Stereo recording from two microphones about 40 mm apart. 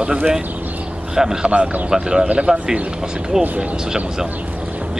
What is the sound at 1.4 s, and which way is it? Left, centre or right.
Speech, right.